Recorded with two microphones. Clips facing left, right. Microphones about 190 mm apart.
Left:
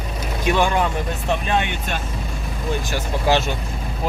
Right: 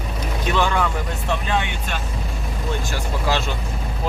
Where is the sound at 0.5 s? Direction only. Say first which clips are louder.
Left 1 dB; 15° left (ahead or behind).